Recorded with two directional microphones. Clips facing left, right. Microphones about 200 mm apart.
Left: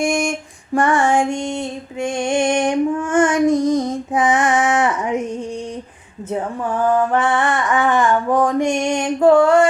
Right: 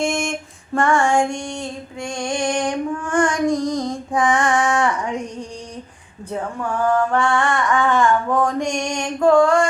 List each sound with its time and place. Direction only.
0.0 s female singing: 15° left (ahead or behind)
6.9 s music: 20° left (ahead or behind)